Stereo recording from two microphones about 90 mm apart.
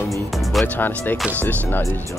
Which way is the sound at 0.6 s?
20° left (ahead or behind).